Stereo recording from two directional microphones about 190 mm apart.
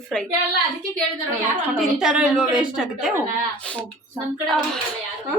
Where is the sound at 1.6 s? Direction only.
Centre (ahead or behind).